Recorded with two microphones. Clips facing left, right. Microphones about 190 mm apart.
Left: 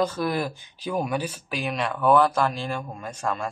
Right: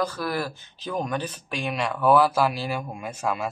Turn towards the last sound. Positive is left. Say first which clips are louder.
# right 1 dB
turn(degrees=-5)  # may be behind; listen again after turning